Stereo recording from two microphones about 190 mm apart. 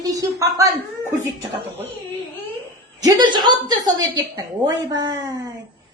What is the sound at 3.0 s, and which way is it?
Speech, 20° right (ahead or behind).